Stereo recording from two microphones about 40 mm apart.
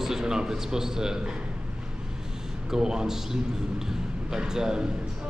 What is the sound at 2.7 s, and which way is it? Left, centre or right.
Speech, centre.